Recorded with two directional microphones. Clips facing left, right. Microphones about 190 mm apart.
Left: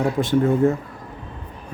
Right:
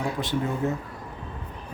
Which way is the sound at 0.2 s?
50° left (ahead or behind).